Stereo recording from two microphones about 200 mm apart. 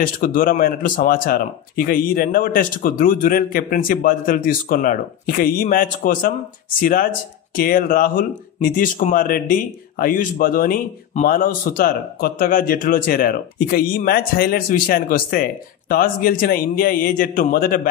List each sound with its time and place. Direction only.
0.0 s speech: 45° left (ahead or behind)